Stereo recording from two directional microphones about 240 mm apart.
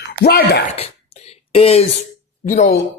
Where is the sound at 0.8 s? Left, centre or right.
Left.